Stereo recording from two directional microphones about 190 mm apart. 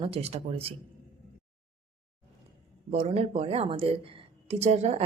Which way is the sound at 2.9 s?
35° right (ahead or behind).